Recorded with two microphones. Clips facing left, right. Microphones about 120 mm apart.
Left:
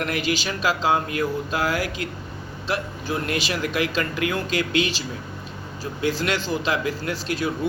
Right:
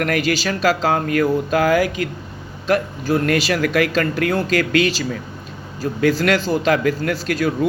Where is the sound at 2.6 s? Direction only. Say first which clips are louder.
Right 8 dB; 50° right (ahead or behind).